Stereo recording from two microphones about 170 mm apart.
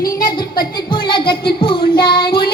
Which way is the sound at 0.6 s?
30° left (ahead or behind).